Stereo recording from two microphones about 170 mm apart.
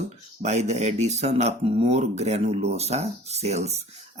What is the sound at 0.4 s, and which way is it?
Speech, 40° right (ahead or behind).